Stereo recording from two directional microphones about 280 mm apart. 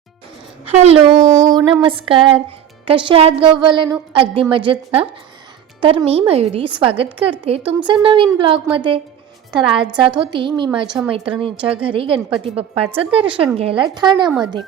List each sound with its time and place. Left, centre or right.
0.7 s a woman's voice: right
10.2 s a woman's voice: centre
14.3 s a woman's voice: centre